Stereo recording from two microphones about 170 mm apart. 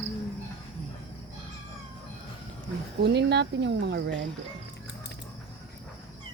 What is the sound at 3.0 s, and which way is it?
Speech, 80° right.